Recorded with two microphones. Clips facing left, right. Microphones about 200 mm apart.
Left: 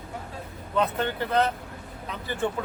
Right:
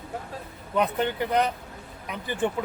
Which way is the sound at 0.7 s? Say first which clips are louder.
Right 1 dB; 15° right (ahead or behind).